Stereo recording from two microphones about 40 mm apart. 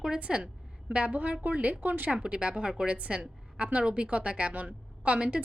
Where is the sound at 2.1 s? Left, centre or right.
Right.